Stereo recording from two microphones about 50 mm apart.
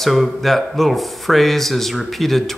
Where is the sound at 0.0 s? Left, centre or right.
Centre.